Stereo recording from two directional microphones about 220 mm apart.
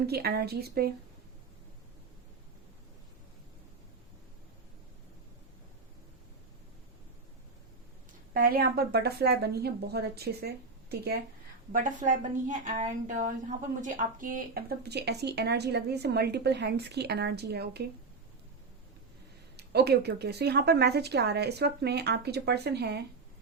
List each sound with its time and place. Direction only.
0.1 s speech: 45° right (ahead or behind)
8.3 s a woman's voice: 40° right (ahead or behind)
19.5 s speech: 45° right (ahead or behind)